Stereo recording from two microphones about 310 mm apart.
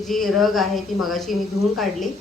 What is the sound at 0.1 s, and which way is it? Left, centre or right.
A woman's voice, centre.